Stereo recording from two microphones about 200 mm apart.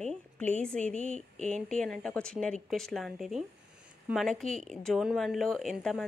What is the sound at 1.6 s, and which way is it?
A woman's voice, 5° left (ahead or behind).